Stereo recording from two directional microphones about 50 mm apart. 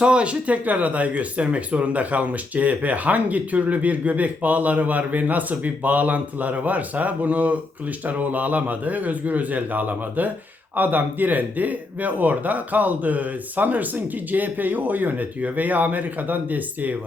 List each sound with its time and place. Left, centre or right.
0.0 s speech: right